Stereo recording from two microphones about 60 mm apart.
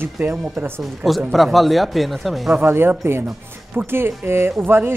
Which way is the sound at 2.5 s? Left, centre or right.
Right.